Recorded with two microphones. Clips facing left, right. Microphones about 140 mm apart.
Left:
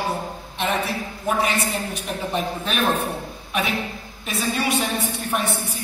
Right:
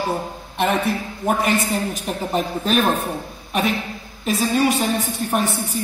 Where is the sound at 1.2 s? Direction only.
45° right (ahead or behind).